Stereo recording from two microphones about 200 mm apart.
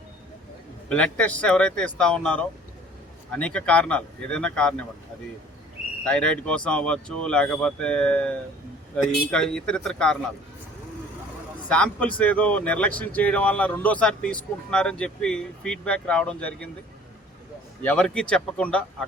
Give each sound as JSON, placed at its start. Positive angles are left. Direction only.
{"t": 0.9, "sound": "speech", "side_deg": 5}
{"t": 6.1, "sound": "speech", "side_deg": 5}
{"t": 11.7, "sound": "speech", "side_deg": 5}
{"t": 17.8, "sound": "speech", "side_deg": 5}